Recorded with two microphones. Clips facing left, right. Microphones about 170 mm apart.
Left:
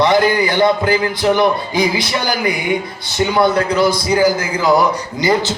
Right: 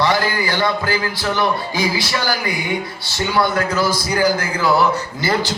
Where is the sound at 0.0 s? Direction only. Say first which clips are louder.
Left 5 dB; 20° left (ahead or behind).